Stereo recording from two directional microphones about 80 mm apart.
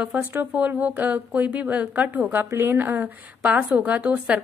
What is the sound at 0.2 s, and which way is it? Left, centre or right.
A woman's voice, right.